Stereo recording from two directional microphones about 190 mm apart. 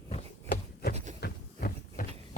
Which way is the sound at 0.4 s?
50° left (ahead or behind).